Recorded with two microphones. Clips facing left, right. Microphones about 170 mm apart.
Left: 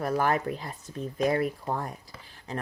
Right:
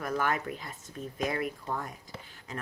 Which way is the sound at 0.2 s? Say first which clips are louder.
Left 5 dB; 35° left (ahead or behind).